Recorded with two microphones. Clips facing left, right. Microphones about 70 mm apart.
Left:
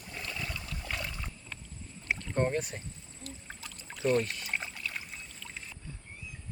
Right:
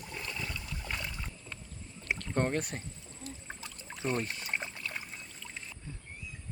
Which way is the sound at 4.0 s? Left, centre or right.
Right.